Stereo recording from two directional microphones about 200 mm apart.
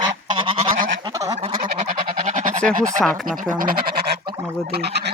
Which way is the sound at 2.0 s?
40° right (ahead or behind).